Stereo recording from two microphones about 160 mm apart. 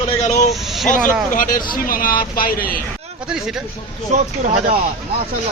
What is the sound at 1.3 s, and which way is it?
Speech, 55° left (ahead or behind).